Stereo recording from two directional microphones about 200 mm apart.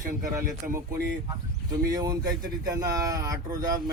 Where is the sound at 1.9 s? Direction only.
20° right (ahead or behind).